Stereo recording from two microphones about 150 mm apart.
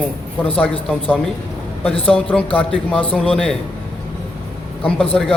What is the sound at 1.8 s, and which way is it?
Speech, 40° left (ahead or behind).